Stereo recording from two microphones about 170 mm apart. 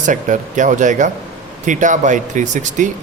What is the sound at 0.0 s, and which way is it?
Speech, 50° right (ahead or behind).